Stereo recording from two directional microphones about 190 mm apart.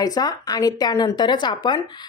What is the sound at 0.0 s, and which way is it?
A woman's voice, 20° left (ahead or behind).